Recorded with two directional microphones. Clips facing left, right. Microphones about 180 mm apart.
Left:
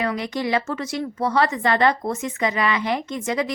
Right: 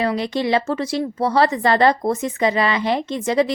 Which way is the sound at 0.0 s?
30° right (ahead or behind).